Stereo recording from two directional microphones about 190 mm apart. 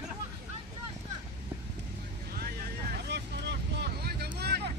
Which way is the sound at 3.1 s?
65° right (ahead or behind).